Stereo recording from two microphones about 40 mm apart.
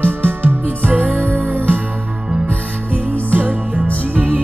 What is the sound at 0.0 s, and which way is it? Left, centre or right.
Music, right.